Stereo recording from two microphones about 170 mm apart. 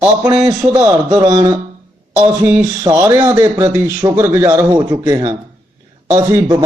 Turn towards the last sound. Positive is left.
turn(degrees=-15)  # may be behind; listen again after turning